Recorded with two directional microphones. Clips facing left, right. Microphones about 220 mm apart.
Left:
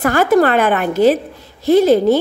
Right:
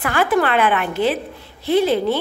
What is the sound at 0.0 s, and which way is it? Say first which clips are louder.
A woman's voice: left 6 dB; 40° left (ahead or behind).